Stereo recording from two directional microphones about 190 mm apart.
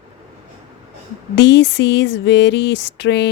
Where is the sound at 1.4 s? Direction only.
65° left (ahead or behind).